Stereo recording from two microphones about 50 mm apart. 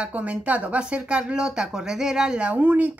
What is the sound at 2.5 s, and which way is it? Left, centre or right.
Speech, right.